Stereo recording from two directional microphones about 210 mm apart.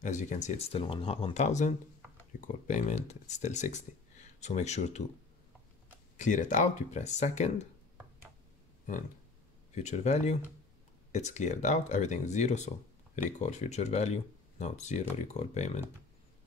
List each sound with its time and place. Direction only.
0.0 s speech: 35° left (ahead or behind)
6.1 s speech: 35° left (ahead or behind)
9.8 s speech: 35° left (ahead or behind)